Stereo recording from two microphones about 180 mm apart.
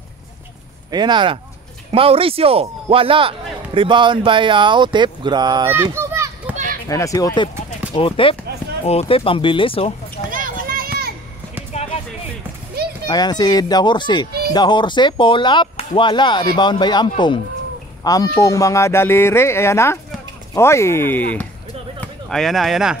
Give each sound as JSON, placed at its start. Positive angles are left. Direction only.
{"t": 0.9, "sound": "a man's voice", "side_deg": -25}
{"t": 5.9, "sound": "children playing", "side_deg": -15}
{"t": 6.9, "sound": "speech", "side_deg": 20}
{"t": 7.9, "sound": "speech", "side_deg": 30}
{"t": 10.3, "sound": "children playing", "side_deg": -50}
{"t": 11.7, "sound": "a sound", "side_deg": 35}
{"t": 13.1, "sound": "speech", "side_deg": 25}